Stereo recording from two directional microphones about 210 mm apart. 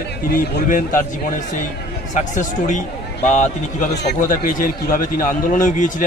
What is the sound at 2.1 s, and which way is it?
Speech, 35° left (ahead or behind).